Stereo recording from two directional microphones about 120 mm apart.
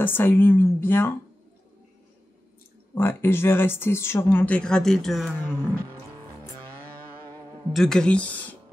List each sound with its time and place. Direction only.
0.0 s a woman's voice: 15° left (ahead or behind)
2.9 s speech: 20° left (ahead or behind); by 5.3 s centre (ahead or behind)
5.4 s a woman's voice: 15° left (ahead or behind)
7.7 s a woman's voice: 5° left (ahead or behind)